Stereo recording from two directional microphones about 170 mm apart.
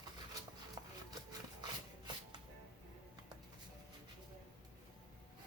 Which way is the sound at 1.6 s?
25° right (ahead or behind).